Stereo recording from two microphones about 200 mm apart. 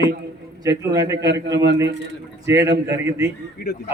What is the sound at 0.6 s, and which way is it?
A man's voice, 15° right (ahead or behind).